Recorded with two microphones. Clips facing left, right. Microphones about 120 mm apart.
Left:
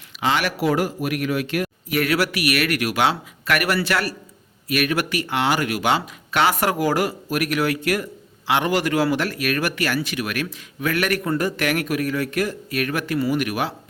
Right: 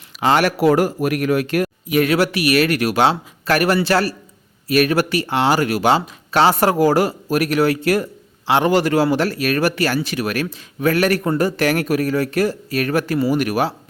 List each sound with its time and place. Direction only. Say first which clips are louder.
0.2 s speech: right 6 dB; 45° right (ahead or behind)
1.9 s speech: right 4 dB; 25° right (ahead or behind)